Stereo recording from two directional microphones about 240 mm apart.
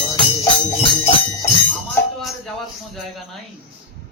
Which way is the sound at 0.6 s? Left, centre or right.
Left.